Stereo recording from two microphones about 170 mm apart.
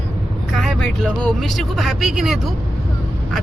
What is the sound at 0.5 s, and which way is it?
Speech, centre (ahead or behind).